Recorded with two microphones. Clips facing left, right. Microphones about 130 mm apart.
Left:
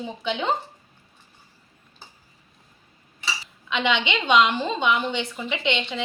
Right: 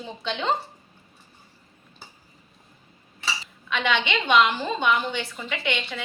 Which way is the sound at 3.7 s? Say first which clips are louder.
Left 1 dB; 20° left (ahead or behind).